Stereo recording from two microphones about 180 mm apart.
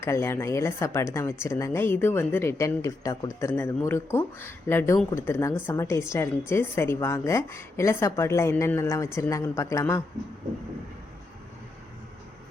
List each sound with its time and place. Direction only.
0.0 s a woman's voice: 15° left (ahead or behind)